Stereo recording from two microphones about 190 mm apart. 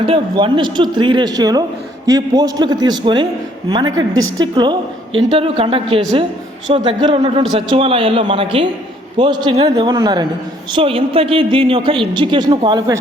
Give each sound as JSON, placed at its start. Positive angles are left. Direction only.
{"t": 0.0, "sound": "a woman's voice", "side_deg": -30}
{"t": 3.8, "sound": "a woman's voice", "side_deg": -90}
{"t": 4.4, "sound": "a woman's voice", "side_deg": -25}